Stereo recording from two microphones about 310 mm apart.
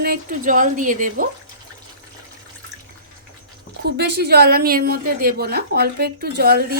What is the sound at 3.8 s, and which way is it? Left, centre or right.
A woman's voice, right.